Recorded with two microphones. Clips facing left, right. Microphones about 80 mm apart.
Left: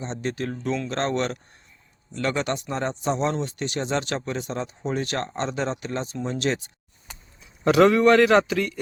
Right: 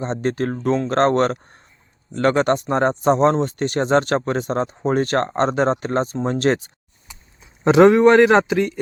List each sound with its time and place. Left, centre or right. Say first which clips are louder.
0.0 s speech: right 7 dB; right
7.6 s speech: right 5 dB; right